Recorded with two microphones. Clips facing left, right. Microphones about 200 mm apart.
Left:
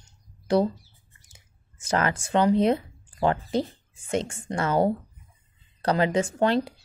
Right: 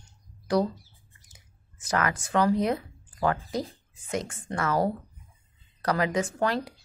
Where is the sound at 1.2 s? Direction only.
25° left (ahead or behind).